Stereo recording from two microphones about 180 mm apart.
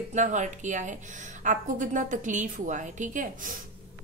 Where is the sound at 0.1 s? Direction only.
40° right (ahead or behind).